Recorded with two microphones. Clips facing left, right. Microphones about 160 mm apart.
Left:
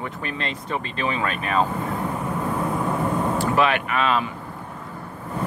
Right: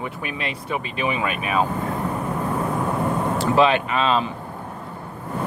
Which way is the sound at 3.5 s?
25° right (ahead or behind).